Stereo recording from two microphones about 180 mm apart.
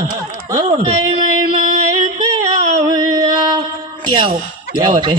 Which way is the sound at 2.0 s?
20° right (ahead or behind).